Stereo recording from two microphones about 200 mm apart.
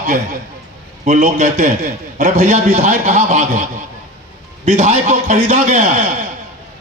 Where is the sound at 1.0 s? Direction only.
40° right (ahead or behind).